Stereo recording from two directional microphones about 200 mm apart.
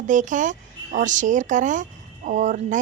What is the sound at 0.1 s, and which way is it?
Speech, 40° right (ahead or behind).